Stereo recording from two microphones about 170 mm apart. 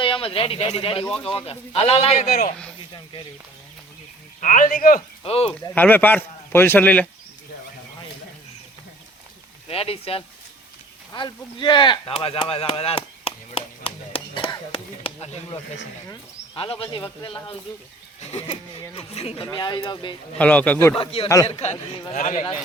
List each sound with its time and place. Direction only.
0.0 s speech: 30° left (ahead or behind)
2.3 s a man's voice: 55° left (ahead or behind)
4.4 s a man's voice: 50° left (ahead or behind)
5.2 s speech: 35° left (ahead or behind)
5.7 s speech: 10° left (ahead or behind)
9.6 s speech: 35° left (ahead or behind)
11.1 s chop: 25° left (ahead or behind)
16.6 s speech: 30° left (ahead or behind)
18.3 s speech: 35° left (ahead or behind)
20.4 s speech: 10° left (ahead or behind)
20.9 s a man's voice: 35° left (ahead or behind)